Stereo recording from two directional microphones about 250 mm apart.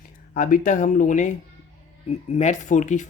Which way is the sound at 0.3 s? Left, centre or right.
Left.